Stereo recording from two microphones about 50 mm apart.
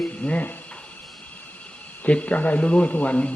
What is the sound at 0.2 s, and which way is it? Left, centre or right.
Speech, left.